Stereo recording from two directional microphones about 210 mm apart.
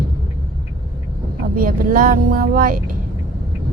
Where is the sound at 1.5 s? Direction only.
40° right (ahead or behind).